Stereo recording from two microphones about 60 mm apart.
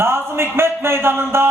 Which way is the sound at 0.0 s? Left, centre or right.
Right.